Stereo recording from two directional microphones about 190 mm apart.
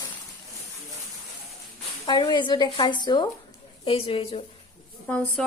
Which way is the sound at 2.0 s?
25° left (ahead or behind).